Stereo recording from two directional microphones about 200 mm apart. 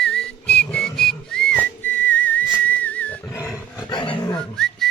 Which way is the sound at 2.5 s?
10° left (ahead or behind).